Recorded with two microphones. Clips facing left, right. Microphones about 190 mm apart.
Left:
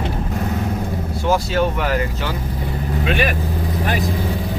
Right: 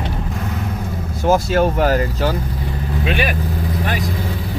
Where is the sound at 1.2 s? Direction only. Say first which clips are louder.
Right 3 dB; 45° right (ahead or behind).